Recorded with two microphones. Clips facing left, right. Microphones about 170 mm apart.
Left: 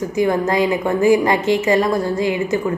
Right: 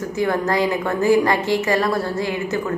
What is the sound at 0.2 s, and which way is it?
A woman's voice, 15° left (ahead or behind).